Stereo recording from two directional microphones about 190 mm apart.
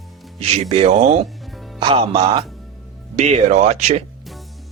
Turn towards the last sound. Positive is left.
turn(degrees=-35)  # may be behind; listen again after turning